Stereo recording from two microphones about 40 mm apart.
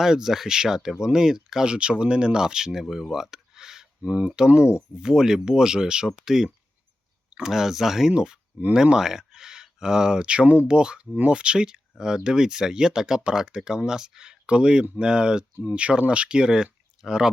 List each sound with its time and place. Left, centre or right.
0.0 s speech: centre
1.6 s speech: right
2.9 s a sound: centre
4.0 s speech: right; by 6.5 s centre
7.3 s a sound: right
7.5 s speech: centre